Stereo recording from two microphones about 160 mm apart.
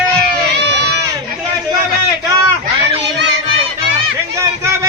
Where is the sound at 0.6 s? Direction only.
90° right.